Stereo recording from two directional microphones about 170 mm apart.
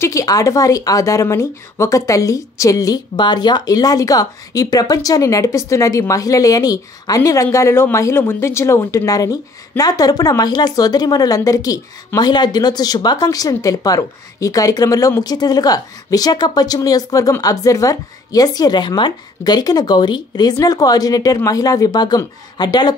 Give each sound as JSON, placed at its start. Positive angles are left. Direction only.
{"t": 0.0, "sound": "speech", "side_deg": 20}